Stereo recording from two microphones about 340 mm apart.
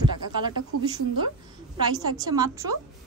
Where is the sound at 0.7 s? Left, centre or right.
Right.